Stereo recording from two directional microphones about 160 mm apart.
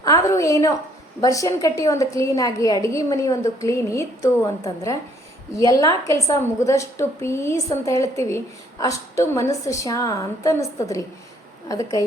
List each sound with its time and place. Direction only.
0.0 s a woman's voice: 20° left (ahead or behind)